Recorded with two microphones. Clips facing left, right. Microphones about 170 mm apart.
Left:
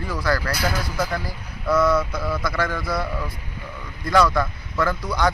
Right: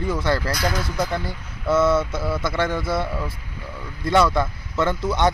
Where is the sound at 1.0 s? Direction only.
25° right (ahead or behind).